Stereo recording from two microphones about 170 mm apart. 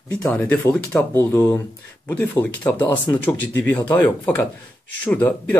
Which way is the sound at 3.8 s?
25° left (ahead or behind).